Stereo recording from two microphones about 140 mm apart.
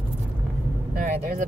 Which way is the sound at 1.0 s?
75° right (ahead or behind).